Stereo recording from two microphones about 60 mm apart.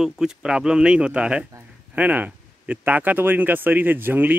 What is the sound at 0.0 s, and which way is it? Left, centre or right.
Speech, centre.